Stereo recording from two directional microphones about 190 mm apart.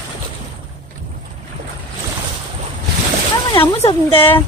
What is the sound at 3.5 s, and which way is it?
Speech, 25° left (ahead or behind).